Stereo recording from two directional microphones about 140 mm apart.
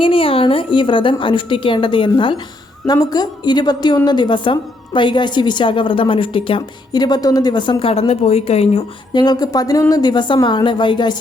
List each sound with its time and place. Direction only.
0.0 s a woman's voice: 40° left (ahead or behind)
9.1 s a woman's voice: 30° left (ahead or behind)